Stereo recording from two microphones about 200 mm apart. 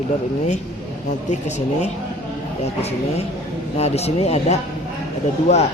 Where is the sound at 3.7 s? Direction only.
30° left (ahead or behind).